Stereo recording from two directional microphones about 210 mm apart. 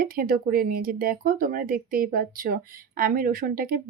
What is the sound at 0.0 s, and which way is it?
Speech, 45° right (ahead or behind).